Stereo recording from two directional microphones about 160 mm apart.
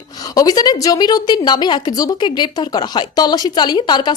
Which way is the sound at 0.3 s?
25° left (ahead or behind).